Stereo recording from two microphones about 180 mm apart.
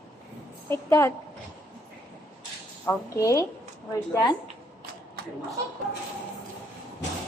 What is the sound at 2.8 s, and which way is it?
Speech, 15° left (ahead or behind).